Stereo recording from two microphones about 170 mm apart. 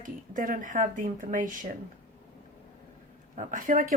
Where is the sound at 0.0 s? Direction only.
50° right (ahead or behind).